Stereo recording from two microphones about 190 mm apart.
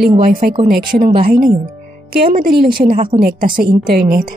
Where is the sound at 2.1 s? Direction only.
50° right (ahead or behind).